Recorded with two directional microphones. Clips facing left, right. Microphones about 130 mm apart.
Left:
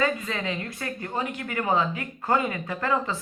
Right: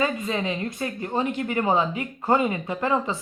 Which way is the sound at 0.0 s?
20° right (ahead or behind).